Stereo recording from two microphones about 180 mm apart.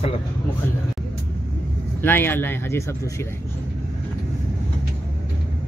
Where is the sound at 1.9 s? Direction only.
10° left (ahead or behind).